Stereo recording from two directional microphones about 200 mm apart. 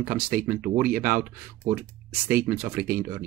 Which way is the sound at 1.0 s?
10° right (ahead or behind).